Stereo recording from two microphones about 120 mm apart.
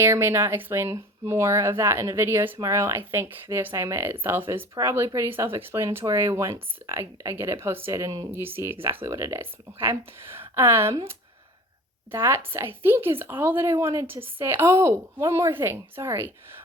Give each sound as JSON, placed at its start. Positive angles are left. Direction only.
{"t": 0.0, "sound": "speech", "side_deg": -20}
{"t": 12.1, "sound": "speech", "side_deg": -20}